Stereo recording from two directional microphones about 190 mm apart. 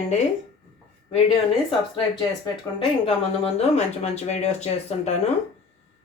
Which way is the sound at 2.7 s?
30° left (ahead or behind).